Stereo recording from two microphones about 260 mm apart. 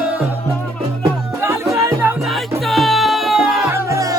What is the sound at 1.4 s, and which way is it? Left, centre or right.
Music, centre.